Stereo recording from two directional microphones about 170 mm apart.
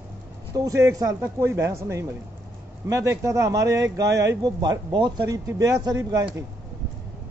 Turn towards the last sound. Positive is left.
turn(degrees=-20)  # may be behind; listen again after turning